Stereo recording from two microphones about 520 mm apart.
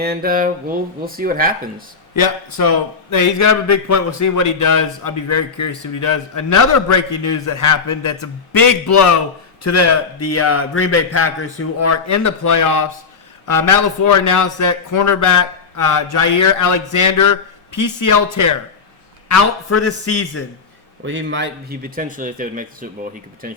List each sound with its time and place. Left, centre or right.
0.0 s speech: centre
2.1 s a man's voice: left
21.0 s speech: right